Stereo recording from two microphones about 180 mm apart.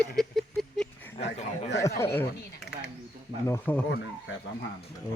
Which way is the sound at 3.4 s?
15° left (ahead or behind).